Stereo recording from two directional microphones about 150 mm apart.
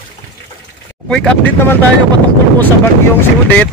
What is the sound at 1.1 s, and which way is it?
Speech, 5° left (ahead or behind).